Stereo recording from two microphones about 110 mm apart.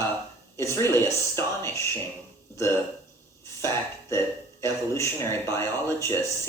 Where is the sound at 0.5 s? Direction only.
25° left (ahead or behind).